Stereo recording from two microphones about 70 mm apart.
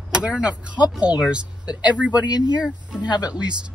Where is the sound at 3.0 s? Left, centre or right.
Left.